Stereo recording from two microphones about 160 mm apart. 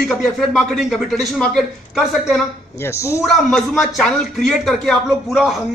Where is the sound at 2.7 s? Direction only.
15° left (ahead or behind).